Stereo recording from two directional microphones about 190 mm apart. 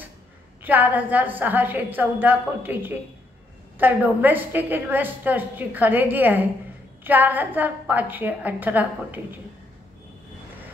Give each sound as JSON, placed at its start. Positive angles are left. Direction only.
{"t": 0.7, "sound": "a woman's voice", "side_deg": -10}